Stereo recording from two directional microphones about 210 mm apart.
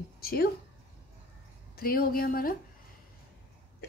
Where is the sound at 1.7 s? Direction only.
45° left (ahead or behind).